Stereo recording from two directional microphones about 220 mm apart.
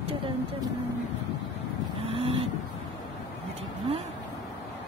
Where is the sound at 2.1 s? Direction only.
25° right (ahead or behind).